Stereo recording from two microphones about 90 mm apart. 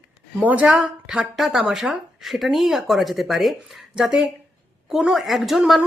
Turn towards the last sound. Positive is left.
turn(degrees=-5)  # may be behind; listen again after turning